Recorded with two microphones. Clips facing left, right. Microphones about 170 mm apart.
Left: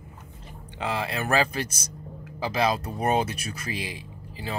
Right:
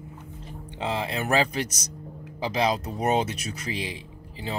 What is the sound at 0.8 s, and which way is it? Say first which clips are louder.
Speech: even; 20° right (ahead or behind).